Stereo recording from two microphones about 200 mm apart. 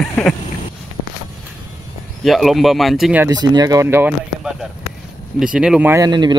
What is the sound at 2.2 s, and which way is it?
Speech, centre (ahead or behind).